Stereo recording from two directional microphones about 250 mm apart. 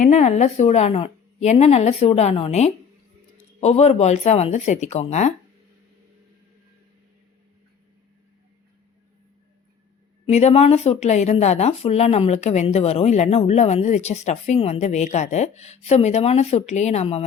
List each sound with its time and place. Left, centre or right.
0.0 s speech: left
10.2 s speech: left